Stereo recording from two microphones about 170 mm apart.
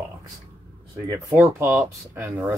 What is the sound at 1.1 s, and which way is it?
Speech, 15° right (ahead or behind).